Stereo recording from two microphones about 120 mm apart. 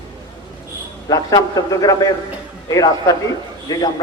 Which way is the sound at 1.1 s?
30° left (ahead or behind).